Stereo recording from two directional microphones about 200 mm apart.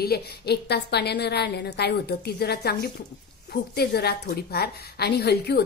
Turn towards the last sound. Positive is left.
turn(degrees=55)  # may be behind; listen again after turning